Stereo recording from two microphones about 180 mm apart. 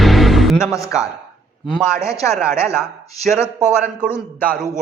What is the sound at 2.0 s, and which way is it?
Speech, 15° left (ahead or behind).